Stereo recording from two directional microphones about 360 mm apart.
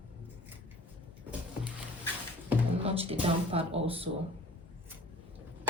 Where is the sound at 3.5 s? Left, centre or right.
Centre.